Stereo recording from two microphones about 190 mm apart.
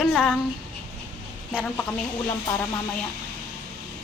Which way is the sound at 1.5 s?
5° right (ahead or behind).